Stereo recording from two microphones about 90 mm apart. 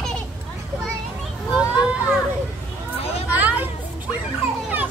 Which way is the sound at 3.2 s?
20° right (ahead or behind).